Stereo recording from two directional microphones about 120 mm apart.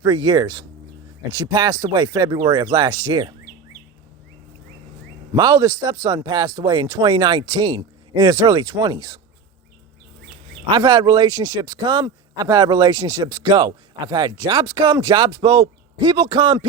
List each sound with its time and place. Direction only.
0.0 s a man's voice: 30° right (ahead or behind)
5.3 s a man's voice: 30° right (ahead or behind)
10.7 s a man's voice: 35° right (ahead or behind)